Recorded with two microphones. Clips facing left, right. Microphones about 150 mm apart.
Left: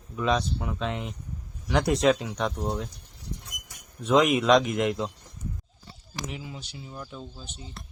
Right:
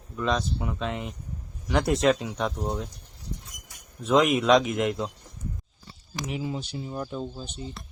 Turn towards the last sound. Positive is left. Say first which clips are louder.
# right 7 dB
turn(degrees=-45)  # may be behind; listen again after turning